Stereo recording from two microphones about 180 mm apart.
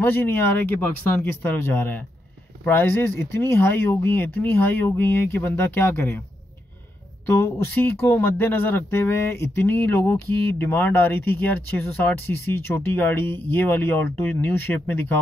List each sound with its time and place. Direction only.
0.0 s speech: 10° left (ahead or behind)
7.2 s speech: 15° left (ahead or behind)